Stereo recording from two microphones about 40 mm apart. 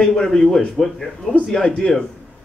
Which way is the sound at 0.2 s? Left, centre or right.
Centre.